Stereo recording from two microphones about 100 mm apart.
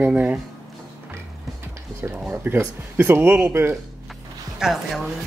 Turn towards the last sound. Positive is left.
turn(degrees=-5)  # may be behind; listen again after turning